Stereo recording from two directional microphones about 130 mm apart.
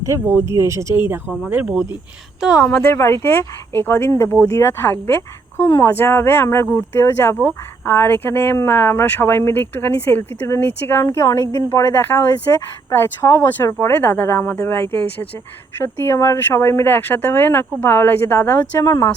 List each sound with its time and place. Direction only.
0.0 s speech: 20° right (ahead or behind)
2.6 s speech: 20° left (ahead or behind)